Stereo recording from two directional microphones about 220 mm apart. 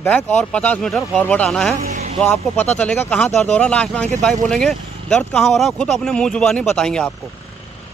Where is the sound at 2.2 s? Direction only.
5° left (ahead or behind).